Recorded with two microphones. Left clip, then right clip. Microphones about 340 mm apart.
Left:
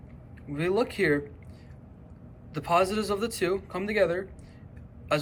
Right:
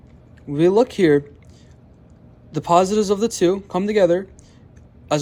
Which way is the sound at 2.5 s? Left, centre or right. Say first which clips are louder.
Right 8 dB; centre.